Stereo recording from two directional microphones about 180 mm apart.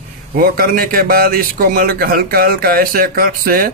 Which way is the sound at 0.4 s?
55° right (ahead or behind).